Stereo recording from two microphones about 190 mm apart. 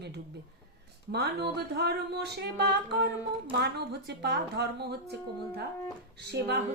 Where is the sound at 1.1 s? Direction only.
60° right (ahead or behind).